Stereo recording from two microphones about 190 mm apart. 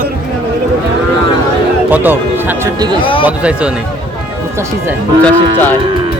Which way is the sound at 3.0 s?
25° left (ahead or behind).